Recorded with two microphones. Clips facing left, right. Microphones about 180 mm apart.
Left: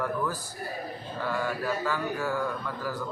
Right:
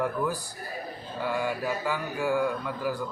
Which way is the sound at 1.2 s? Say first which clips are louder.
Right 1 dB; 15° right (ahead or behind).